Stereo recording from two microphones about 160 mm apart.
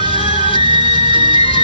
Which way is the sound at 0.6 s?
30° right (ahead or behind).